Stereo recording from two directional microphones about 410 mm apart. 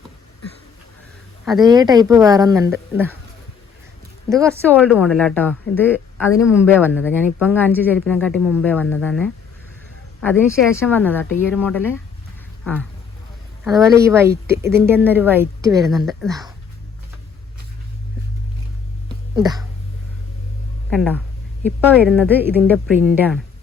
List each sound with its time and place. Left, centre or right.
1.5 s speech: centre
4.3 s a woman's voice: centre
13.7 s a woman's voice: centre
19.4 s speech: centre
20.9 s a woman's voice: centre